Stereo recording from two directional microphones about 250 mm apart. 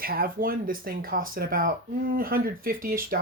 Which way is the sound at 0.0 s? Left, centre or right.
Right.